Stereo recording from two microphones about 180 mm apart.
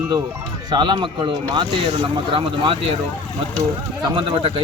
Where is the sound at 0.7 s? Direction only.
25° right (ahead or behind).